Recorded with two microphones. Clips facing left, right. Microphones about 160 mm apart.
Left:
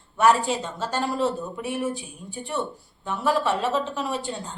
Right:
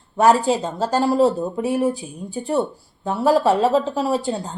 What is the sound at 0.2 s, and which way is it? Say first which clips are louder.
Speech: right 5 dB; 35° right (ahead or behind).